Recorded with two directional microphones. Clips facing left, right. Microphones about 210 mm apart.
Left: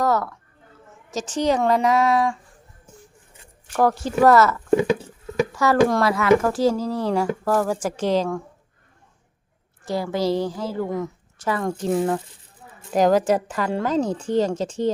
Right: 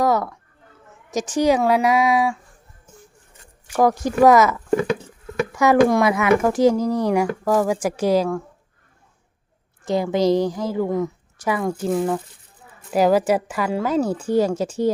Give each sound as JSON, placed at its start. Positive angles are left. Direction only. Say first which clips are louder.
{"t": 0.0, "sound": "a sound", "louder": "right 2 dB", "side_deg": -15}
{"t": 1.1, "sound": "a woman's voice", "louder": "right 3 dB", "side_deg": -10}
{"t": 3.7, "sound": "a woman's voice", "louder": "right 2 dB", "side_deg": -10}
{"t": 9.8, "sound": "a woman's voice", "louder": "right 4 dB", "side_deg": -20}